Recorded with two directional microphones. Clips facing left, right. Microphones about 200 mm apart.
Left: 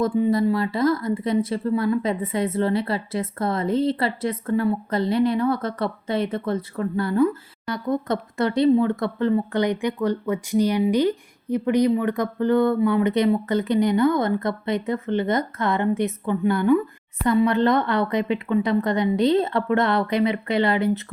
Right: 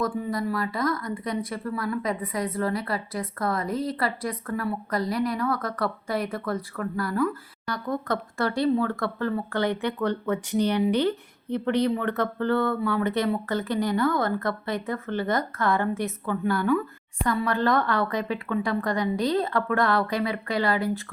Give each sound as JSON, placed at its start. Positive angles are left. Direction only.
{"t": 0.0, "sound": "speech", "side_deg": 25}